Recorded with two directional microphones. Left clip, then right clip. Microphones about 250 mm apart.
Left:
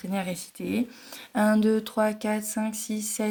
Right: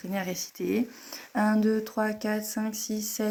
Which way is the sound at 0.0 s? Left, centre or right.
Left.